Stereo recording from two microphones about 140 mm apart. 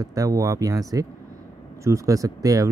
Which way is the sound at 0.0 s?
25° right (ahead or behind).